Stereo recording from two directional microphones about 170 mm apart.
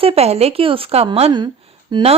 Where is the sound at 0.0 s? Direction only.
35° right (ahead or behind).